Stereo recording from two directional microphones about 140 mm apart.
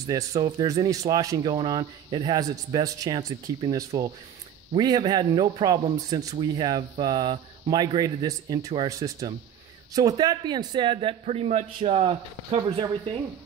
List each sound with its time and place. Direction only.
0.0 s speech: 25° right (ahead or behind)